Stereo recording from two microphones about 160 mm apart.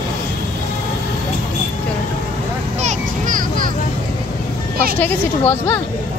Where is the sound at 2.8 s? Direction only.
50° right (ahead or behind).